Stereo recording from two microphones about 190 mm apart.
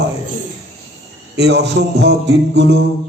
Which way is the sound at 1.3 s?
65° right (ahead or behind).